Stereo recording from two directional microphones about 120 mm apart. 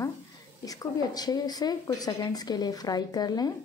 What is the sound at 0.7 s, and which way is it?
A woman's voice, 30° left (ahead or behind).